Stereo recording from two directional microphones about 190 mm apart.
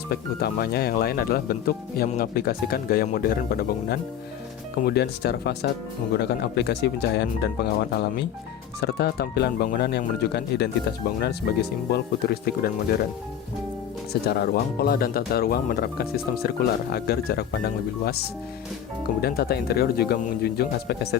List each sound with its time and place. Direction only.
0.1 s speech: 55° left (ahead or behind)
14.1 s speech: 55° left (ahead or behind)
19.2 s speech: 55° left (ahead or behind)